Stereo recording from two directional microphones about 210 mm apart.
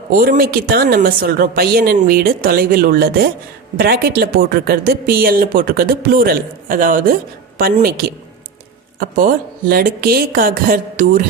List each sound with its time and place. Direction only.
0.2 s speech: 45° right (ahead or behind)